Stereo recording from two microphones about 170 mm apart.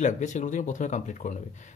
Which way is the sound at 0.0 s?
45° left (ahead or behind).